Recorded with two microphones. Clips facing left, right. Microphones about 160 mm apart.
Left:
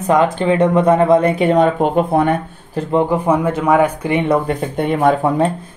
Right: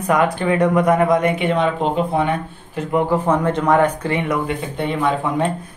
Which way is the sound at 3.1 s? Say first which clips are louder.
Left 2 dB; 10° left (ahead or behind).